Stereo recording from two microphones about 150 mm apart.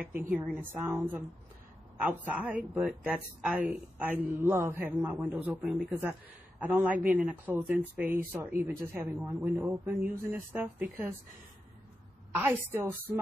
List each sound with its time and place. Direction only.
0.2 s speech: 10° right (ahead or behind)
8.5 s speech: 15° right (ahead or behind)
12.4 s speech: 15° right (ahead or behind)